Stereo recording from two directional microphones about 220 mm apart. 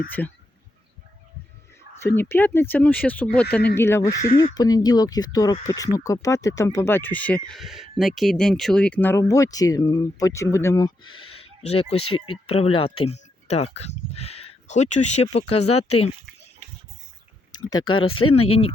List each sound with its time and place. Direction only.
2.0 s speech: 10° left (ahead or behind); by 15.8 s 25° left (ahead or behind)
17.5 s speech: 20° left (ahead or behind)
18.0 s speech: 70° left (ahead or behind)
18.3 s speech: 25° left (ahead or behind)